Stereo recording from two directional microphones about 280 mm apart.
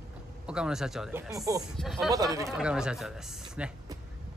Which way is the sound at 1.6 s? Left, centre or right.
Centre.